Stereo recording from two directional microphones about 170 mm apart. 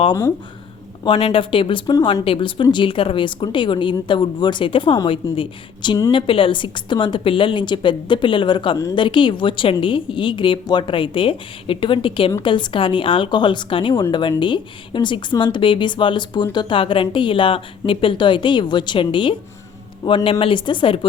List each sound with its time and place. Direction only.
0.1 s speech: 15° left (ahead or behind)
1.0 s speech: 30° left (ahead or behind)